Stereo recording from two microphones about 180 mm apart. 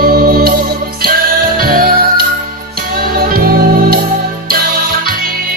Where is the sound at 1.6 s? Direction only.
55° right (ahead or behind).